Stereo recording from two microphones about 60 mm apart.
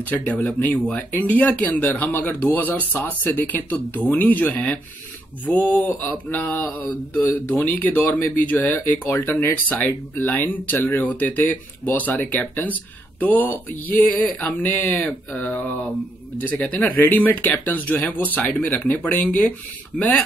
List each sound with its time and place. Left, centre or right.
0.0 s speech: left
5.4 s mantra: left
13.2 s speech: left